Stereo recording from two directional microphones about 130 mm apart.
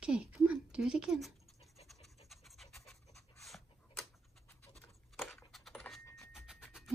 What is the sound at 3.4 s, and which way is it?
Tick-tock, centre (ahead or behind).